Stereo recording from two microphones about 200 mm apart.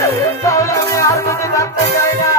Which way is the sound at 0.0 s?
15° left (ahead or behind).